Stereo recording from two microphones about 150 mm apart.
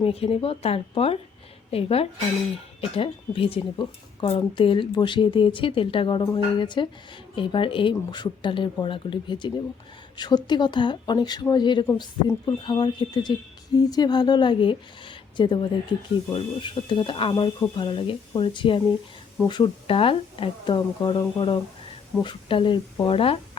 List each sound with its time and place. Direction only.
0.0 s speech: 40° left (ahead or behind)